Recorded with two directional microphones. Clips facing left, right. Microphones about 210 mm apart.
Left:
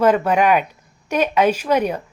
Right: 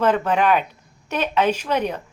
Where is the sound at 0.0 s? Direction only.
10° left (ahead or behind).